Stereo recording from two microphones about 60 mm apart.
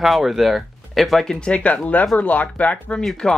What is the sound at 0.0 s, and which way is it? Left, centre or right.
Speech, centre.